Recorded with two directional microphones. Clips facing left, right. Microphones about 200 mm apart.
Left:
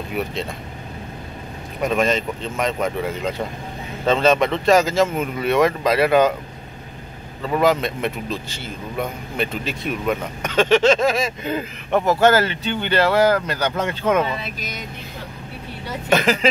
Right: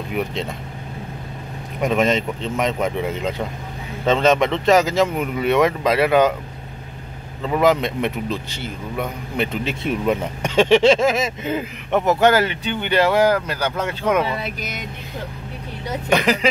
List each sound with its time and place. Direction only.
0.1 s speech: 20° right (ahead or behind)
1.8 s speech: 20° right (ahead or behind)
7.6 s speech: 20° right (ahead or behind)
16.1 s speech: 15° right (ahead or behind)